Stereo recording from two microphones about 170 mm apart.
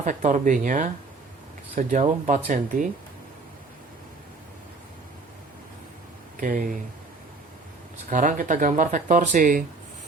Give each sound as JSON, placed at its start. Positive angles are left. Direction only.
{"t": 0.0, "sound": "speech", "side_deg": -45}
{"t": 6.4, "sound": "speech", "side_deg": -50}
{"t": 8.1, "sound": "speech", "side_deg": -50}